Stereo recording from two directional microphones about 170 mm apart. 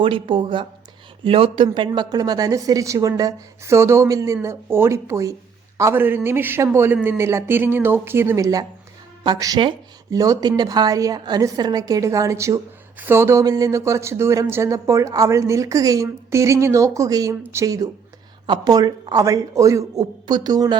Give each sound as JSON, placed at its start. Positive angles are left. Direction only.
{"t": 0.0, "sound": "speech", "side_deg": -30}